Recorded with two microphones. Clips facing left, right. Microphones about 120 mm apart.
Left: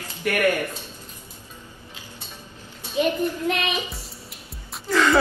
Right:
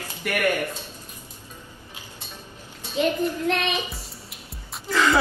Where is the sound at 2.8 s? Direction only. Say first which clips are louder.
Left 1 dB; 15° left (ahead or behind).